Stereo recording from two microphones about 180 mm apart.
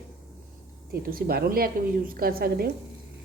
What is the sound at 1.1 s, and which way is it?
A woman's voice, 55° right (ahead or behind).